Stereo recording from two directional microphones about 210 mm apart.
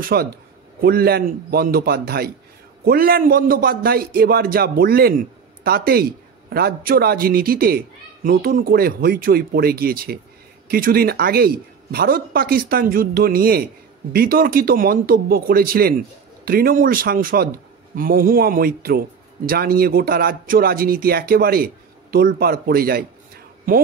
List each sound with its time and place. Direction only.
0.0 s a man's voice: 45° right (ahead or behind)